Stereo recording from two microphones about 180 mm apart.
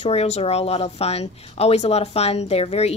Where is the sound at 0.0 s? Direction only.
35° left (ahead or behind).